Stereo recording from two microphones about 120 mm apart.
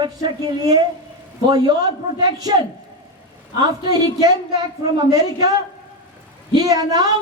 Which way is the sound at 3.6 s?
35° right (ahead or behind).